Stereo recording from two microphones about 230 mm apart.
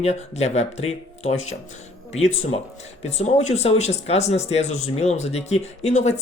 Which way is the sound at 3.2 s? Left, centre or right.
Left.